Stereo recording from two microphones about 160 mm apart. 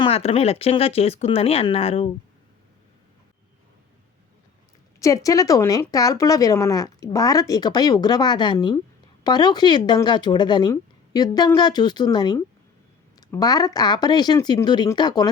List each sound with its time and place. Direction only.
0.0 s speech: 40° left (ahead or behind)
4.9 s speech: 20° left (ahead or behind)